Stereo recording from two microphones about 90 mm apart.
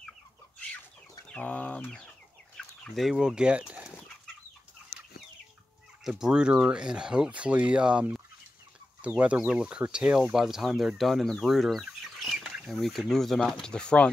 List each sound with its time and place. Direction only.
1.3 s speech: 15° left (ahead or behind)
2.5 s speech: centre (ahead or behind)
6.0 s speech: 5° right (ahead or behind); by 14.0 s 10° left (ahead or behind)